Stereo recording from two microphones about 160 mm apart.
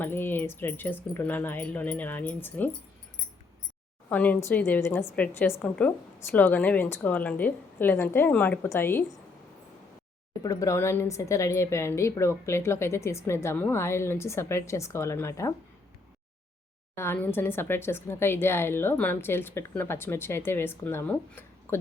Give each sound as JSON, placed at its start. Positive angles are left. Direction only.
{"t": 0.0, "sound": "a woman's voice", "side_deg": 15}
{"t": 4.1, "sound": "a woman's voice", "side_deg": 10}
{"t": 10.4, "sound": "a woman's voice", "side_deg": 20}
{"t": 16.9, "sound": "a woman's voice", "side_deg": 15}